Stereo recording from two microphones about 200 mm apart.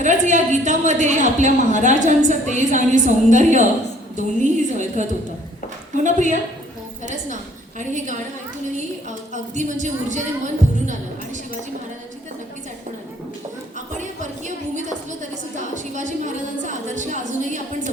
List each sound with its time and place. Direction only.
0.0 s a woman's voice: 35° right (ahead or behind)
7.8 s a woman's voice: 40° right (ahead or behind)
13.7 s a woman's voice: 40° right (ahead or behind)